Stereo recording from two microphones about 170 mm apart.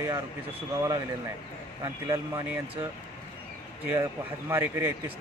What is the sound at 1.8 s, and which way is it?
Speech, 20° right (ahead or behind).